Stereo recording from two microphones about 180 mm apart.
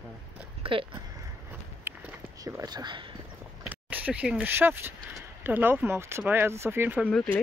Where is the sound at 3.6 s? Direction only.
10° right (ahead or behind).